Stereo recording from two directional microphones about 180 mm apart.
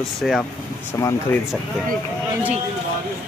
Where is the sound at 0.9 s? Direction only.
15° left (ahead or behind).